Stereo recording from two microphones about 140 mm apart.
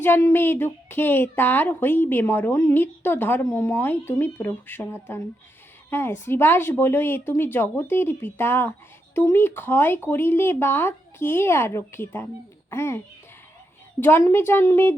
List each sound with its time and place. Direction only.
0.0 s a woman's voice: 20° left (ahead or behind)
14.0 s a woman's voice: 15° left (ahead or behind)